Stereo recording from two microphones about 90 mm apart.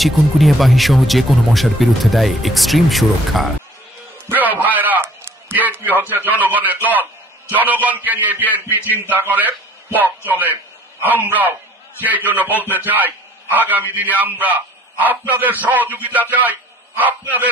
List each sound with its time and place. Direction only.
0.0 s speech: centre (ahead or behind)
4.3 s a man's voice: 20° right (ahead or behind)